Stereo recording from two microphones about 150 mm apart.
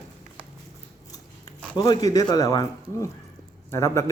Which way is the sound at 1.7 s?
25° left (ahead or behind).